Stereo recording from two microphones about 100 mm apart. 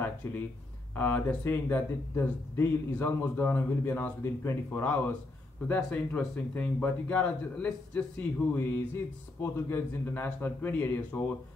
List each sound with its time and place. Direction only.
0.2 s speech: 35° left (ahead or behind)
0.9 s a man's voice: 20° left (ahead or behind)